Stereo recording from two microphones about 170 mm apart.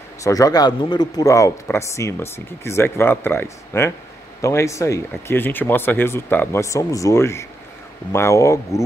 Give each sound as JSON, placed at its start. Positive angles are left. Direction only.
{"t": 0.2, "sound": "speech", "side_deg": 20}